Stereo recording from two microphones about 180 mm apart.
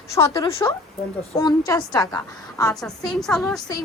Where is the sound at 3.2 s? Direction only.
5° left (ahead or behind).